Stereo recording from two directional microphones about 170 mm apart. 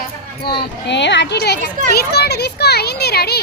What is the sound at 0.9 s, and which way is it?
A child's voice, 90° left.